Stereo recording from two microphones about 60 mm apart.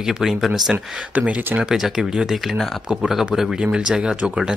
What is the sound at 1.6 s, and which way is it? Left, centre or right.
Speech, centre.